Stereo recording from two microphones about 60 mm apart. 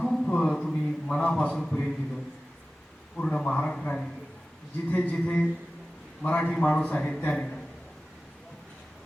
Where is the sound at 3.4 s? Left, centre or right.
Left.